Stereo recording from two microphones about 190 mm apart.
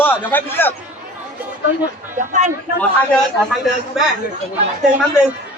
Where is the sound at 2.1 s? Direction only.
40° right (ahead or behind).